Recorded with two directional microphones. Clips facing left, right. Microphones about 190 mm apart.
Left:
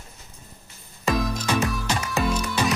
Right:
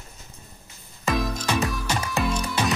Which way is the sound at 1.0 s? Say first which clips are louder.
Left 1 dB; centre (ahead or behind).